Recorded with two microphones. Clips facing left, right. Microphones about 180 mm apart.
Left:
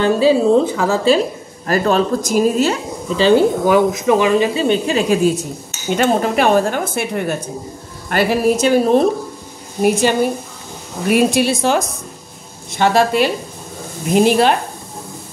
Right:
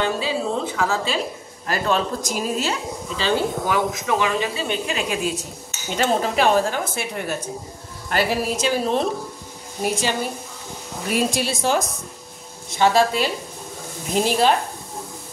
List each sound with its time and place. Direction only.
0.0 s a woman's voice: 40° left (ahead or behind)
3.2 s speech: 30° left (ahead or behind)
4.6 s speech: 30° left (ahead or behind); by 14.6 s 65° left (ahead or behind)